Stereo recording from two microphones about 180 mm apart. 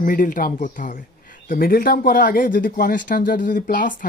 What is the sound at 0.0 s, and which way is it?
A man's voice, 50° left (ahead or behind).